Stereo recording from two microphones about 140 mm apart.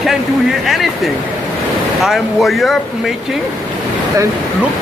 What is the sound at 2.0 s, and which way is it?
Speech, centre (ahead or behind).